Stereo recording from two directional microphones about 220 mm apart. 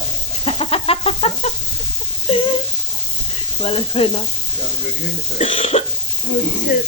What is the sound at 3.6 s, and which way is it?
Speech, 25° left (ahead or behind).